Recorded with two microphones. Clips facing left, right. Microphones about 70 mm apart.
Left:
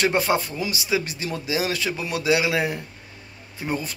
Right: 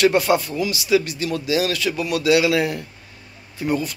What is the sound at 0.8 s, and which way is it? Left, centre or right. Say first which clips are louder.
Speech: right 8 dB; left.